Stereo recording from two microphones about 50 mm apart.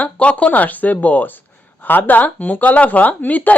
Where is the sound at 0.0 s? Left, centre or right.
Left.